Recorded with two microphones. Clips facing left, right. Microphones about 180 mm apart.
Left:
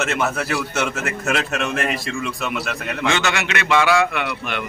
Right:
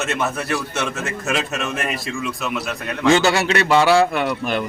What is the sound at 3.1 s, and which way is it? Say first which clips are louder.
A man's voice: right 8 dB; 35° right (ahead or behind).